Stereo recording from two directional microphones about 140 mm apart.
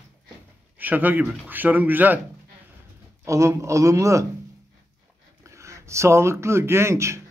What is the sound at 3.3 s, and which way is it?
A man's voice, 20° right (ahead or behind).